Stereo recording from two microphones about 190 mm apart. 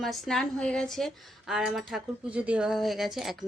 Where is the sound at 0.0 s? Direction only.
Centre (ahead or behind).